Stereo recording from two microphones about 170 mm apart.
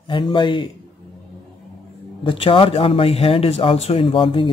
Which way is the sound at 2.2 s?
30° left (ahead or behind).